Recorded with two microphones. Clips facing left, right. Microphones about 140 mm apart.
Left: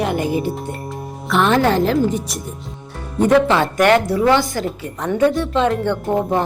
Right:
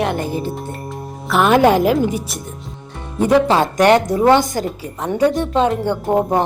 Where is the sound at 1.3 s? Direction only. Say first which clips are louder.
Right 3 dB; 5° right (ahead or behind).